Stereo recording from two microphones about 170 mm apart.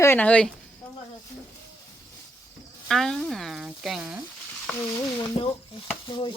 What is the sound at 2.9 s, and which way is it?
Speech, centre (ahead or behind).